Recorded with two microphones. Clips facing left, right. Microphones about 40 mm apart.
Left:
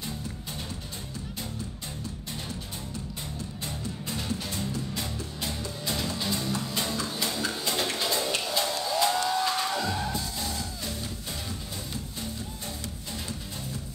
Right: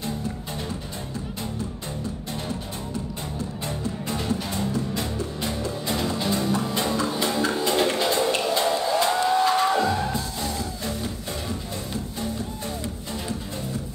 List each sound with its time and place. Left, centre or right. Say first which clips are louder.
3.6 s music: right 6 dB; right